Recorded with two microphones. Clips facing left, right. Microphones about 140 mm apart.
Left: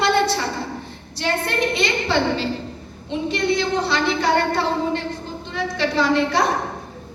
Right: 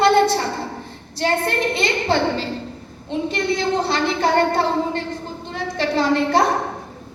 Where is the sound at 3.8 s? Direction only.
45° right (ahead or behind).